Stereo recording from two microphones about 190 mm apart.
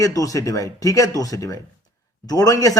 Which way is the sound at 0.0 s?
20° left (ahead or behind).